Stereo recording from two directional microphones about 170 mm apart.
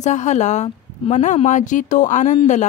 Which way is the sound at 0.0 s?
45° left (ahead or behind).